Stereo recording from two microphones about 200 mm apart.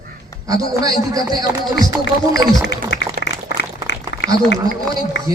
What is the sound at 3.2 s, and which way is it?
Applause, 60° left (ahead or behind).